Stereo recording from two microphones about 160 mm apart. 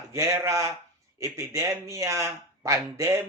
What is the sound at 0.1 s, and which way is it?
Speech, 15° right (ahead or behind).